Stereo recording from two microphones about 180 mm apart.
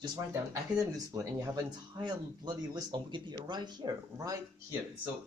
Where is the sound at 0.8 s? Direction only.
20° right (ahead or behind).